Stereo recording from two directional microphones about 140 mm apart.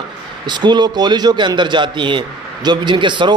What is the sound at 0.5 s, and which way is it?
A man's voice, 30° right (ahead or behind).